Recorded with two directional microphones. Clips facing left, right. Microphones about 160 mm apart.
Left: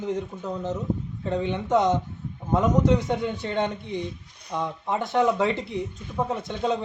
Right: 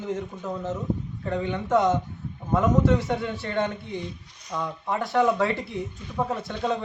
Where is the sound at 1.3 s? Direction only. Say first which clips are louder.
Left 1 dB; 20° left (ahead or behind).